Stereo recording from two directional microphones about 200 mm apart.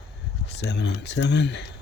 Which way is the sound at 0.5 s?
60° left (ahead or behind).